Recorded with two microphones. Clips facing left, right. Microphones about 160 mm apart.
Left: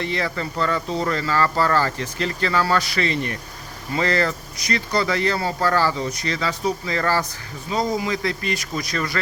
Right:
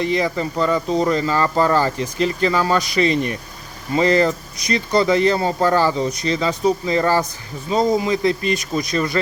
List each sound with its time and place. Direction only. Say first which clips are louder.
0.0 s speech: right 6 dB; 15° right (ahead or behind)